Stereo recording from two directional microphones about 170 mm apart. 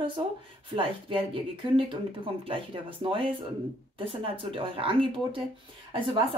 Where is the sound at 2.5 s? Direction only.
30° right (ahead or behind).